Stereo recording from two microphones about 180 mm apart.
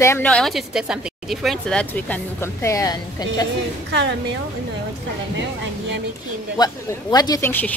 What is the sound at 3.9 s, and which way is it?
Speech, 75° right (ahead or behind).